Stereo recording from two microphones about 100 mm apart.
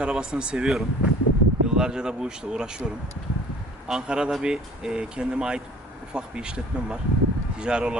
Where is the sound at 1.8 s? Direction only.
5° right (ahead or behind).